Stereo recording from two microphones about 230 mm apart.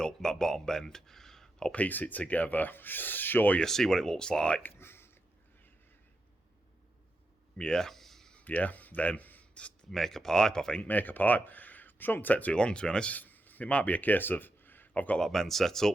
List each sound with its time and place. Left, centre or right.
0.0 s speech: centre
4.8 s a sound: centre
7.6 s speech: centre